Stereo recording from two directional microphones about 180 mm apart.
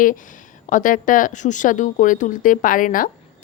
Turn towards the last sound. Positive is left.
turn(degrees=50)  # may be behind; listen again after turning